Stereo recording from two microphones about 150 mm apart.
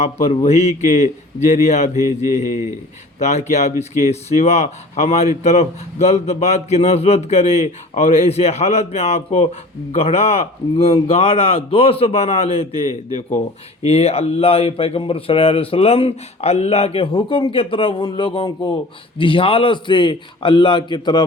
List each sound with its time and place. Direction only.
0.0 s speech: 45° left (ahead or behind)
1.9 s mantra: 20° right (ahead or behind)
3.2 s speech: 50° left (ahead or behind); by 21.2 s 30° left (ahead or behind)